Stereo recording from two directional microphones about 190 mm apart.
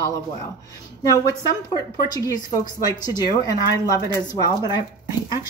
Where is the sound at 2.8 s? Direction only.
20° left (ahead or behind).